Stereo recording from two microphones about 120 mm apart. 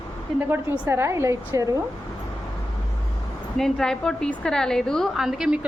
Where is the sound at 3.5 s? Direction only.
5° left (ahead or behind).